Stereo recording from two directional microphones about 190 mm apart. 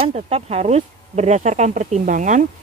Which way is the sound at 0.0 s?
35° right (ahead or behind).